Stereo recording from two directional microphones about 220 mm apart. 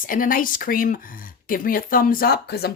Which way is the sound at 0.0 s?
40° left (ahead or behind).